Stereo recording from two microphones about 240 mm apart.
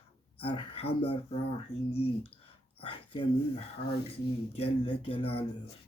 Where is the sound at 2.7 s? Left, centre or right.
Left.